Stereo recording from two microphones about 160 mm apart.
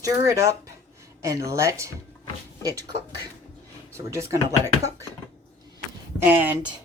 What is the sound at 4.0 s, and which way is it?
Speech, 20° right (ahead or behind).